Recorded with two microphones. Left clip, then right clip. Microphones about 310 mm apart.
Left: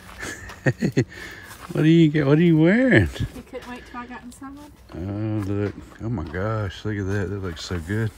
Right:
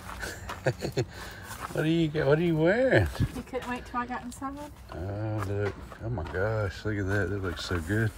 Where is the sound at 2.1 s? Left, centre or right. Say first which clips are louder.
Left 6 dB; left.